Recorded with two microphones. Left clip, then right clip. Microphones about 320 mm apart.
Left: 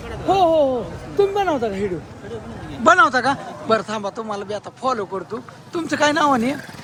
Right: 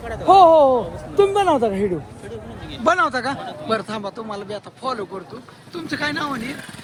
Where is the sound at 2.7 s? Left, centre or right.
Centre.